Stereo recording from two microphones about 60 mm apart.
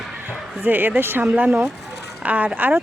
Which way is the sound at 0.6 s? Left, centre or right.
Right.